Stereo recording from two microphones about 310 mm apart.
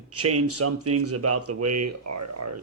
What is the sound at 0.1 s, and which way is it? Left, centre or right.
Speech, right.